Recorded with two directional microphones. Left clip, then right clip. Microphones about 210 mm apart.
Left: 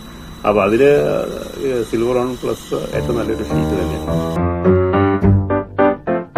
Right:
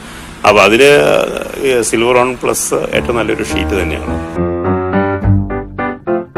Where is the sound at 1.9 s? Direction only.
Centre (ahead or behind).